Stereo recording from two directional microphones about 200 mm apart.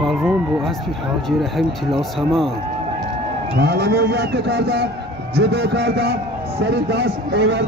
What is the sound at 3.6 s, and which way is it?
A man's voice, 55° right (ahead or behind).